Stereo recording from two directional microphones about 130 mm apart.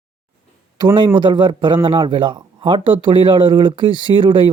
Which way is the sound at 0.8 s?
35° right (ahead or behind).